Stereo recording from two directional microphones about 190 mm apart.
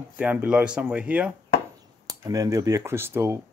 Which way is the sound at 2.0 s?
20° right (ahead or behind).